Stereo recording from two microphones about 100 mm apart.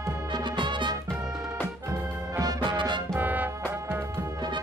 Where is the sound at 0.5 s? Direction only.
50° right (ahead or behind).